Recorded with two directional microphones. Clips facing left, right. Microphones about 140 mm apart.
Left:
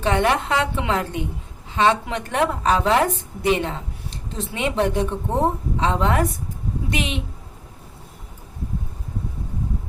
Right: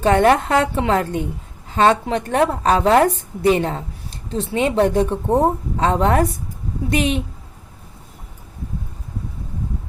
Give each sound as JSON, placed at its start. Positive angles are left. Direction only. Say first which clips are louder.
{"t": 0.0, "sound": "a woman's voice", "louder": "right 6 dB", "side_deg": -45}